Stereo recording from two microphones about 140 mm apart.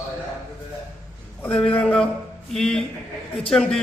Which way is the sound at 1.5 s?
10° left (ahead or behind).